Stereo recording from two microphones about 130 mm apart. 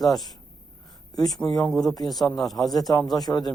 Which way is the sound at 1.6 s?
5° left (ahead or behind).